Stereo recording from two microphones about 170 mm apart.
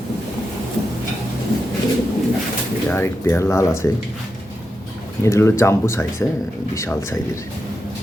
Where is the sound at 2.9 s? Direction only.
15° left (ahead or behind).